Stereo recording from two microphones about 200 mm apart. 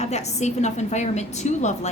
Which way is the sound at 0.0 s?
35° left (ahead or behind).